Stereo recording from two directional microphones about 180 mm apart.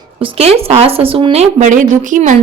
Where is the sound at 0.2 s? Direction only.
30° right (ahead or behind).